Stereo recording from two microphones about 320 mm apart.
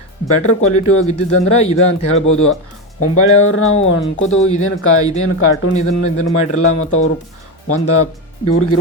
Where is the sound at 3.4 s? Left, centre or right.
Left.